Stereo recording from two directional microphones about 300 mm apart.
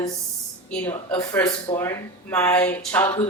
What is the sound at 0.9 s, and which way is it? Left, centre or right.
Speech, centre.